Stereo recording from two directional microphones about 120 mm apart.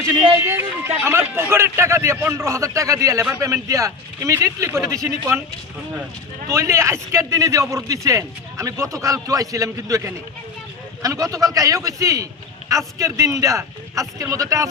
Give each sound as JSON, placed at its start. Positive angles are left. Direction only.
{"t": 0.3, "sound": "a man's voice", "side_deg": -20}
{"t": 6.5, "sound": "a man's voice", "side_deg": -25}